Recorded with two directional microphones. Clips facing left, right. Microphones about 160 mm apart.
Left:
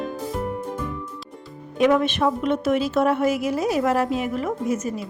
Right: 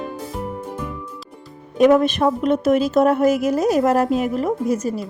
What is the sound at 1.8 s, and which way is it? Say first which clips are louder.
A woman's voice: right 5 dB; 40° right (ahead or behind).